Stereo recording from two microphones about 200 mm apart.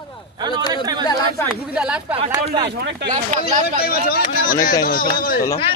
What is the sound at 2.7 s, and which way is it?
Speech, 60° right (ahead or behind).